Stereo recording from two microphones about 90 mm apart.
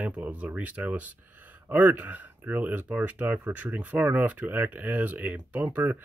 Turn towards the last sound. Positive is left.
turn(degrees=-20)  # may be behind; listen again after turning